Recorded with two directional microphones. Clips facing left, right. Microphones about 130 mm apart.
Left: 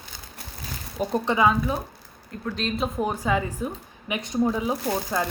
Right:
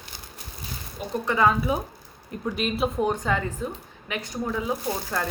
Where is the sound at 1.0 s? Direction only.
40° left (ahead or behind).